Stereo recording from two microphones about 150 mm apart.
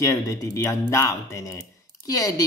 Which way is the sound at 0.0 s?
20° left (ahead or behind).